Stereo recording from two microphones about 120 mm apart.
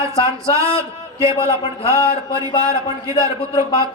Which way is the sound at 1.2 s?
50° left (ahead or behind).